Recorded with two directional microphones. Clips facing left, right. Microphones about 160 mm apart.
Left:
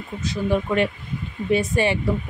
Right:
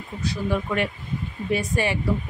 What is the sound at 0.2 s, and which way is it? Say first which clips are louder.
A woman's voice: left 3 dB; 20° left (ahead or behind).